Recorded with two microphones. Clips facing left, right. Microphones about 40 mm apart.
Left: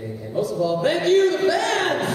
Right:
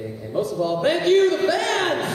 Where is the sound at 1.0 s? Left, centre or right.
Right.